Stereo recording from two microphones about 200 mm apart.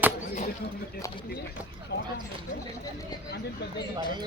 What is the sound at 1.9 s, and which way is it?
Speech, 65° left (ahead or behind).